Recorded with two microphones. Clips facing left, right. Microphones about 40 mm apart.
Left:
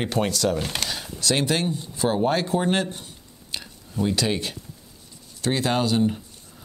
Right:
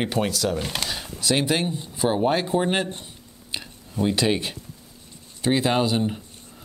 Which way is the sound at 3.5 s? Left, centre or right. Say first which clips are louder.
Right 1 dB; centre.